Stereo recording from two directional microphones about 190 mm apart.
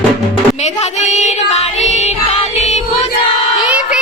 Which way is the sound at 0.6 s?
35° left (ahead or behind).